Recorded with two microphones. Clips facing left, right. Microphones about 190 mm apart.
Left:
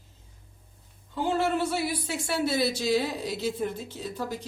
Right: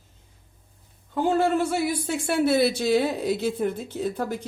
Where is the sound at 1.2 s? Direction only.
50° right (ahead or behind).